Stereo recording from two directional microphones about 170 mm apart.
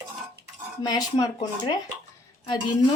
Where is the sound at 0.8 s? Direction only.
20° left (ahead or behind).